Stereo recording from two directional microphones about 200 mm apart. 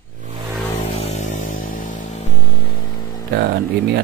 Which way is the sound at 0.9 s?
30° left (ahead or behind).